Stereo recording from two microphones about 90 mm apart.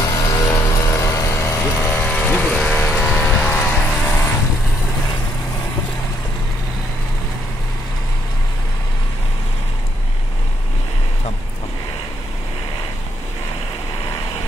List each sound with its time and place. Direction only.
0.0 s music: 40° left (ahead or behind)
0.7 s a sound: 35° left (ahead or behind)
2.0 s vehicle: 10° left (ahead or behind)
2.5 s music: 10° left (ahead or behind)